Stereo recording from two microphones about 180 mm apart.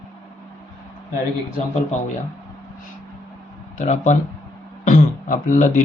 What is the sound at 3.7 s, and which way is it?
Speech, 40° left (ahead or behind).